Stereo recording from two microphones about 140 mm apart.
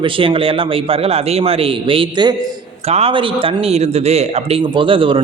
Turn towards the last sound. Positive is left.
turn(degrees=-40)  # may be behind; listen again after turning